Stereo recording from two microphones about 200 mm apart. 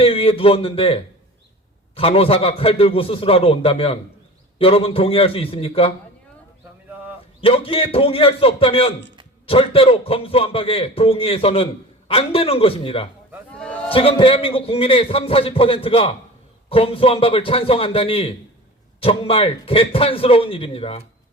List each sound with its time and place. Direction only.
0.0 s a man's voice: 30° left (ahead or behind)
7.4 s a man's voice: 25° left (ahead or behind)
13.5 s a sound: 5° left (ahead or behind)
13.9 s a man's voice: 25° left (ahead or behind)